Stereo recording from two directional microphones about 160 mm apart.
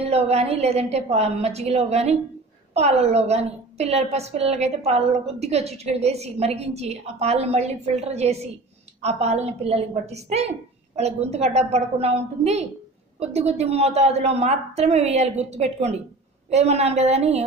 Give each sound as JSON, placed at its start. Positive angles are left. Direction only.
{"t": 0.0, "sound": "a woman's voice", "side_deg": -40}